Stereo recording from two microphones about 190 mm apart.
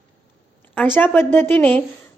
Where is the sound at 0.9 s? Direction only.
10° left (ahead or behind).